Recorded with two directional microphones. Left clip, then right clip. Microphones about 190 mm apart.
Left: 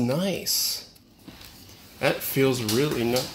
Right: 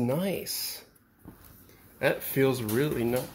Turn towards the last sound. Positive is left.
turn(degrees=-5)  # may be behind; listen again after turning